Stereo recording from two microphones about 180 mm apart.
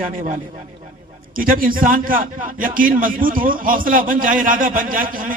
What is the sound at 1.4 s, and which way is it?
A man's voice, 50° right (ahead or behind).